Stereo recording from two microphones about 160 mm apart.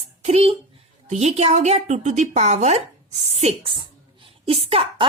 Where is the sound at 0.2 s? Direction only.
40° right (ahead or behind).